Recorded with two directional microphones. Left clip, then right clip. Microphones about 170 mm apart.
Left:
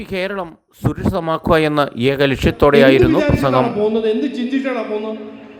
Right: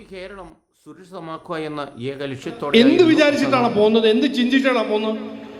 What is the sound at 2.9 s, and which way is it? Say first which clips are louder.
A man's voice: even; 15° right (ahead or behind).